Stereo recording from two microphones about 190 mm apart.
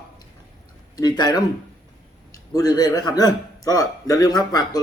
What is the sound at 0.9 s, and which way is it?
A man's voice, 20° left (ahead or behind).